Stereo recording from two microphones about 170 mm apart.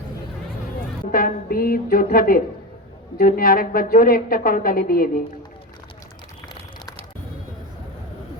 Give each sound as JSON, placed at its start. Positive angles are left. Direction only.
{"t": 1.1, "sound": "a woman's voice", "side_deg": 60}